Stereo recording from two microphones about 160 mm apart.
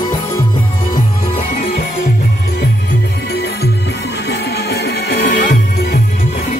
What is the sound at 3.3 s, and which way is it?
Music, 90° left.